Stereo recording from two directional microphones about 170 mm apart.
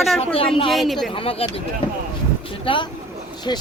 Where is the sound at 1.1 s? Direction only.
35° left (ahead or behind).